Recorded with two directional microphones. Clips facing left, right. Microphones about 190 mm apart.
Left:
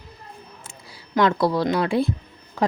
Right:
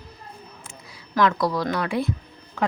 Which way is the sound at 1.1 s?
30° left (ahead or behind).